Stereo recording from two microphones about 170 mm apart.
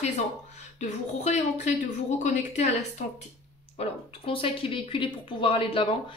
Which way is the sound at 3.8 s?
30° left (ahead or behind).